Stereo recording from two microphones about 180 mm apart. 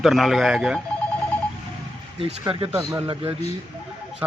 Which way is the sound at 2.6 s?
15° right (ahead or behind).